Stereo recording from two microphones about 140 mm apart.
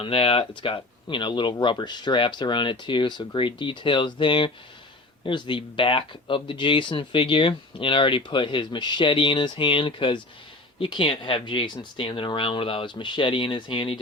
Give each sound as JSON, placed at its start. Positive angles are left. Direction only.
{"t": 0.0, "sound": "speech", "side_deg": 45}